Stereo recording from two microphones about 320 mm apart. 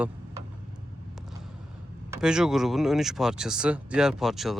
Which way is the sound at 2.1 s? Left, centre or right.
Centre.